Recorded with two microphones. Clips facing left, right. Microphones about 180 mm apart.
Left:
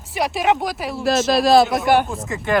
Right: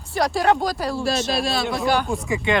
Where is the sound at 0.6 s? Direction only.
Centre (ahead or behind).